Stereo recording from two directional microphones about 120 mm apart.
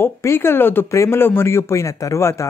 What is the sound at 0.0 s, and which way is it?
Speech, 20° left (ahead or behind).